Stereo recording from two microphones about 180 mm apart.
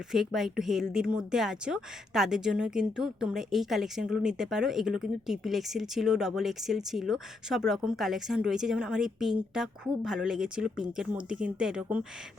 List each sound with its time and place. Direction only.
0.1 s a woman's voice: centre (ahead or behind)